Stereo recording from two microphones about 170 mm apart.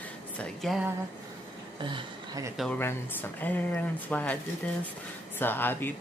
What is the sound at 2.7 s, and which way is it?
Speech, 10° left (ahead or behind).